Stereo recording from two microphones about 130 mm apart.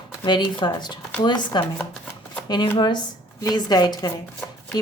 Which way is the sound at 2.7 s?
35° left (ahead or behind).